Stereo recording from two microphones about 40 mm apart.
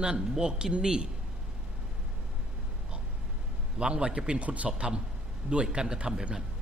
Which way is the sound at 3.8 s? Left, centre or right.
Right.